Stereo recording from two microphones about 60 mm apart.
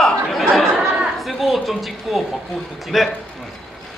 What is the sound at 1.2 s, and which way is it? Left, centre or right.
A woman's voice, centre.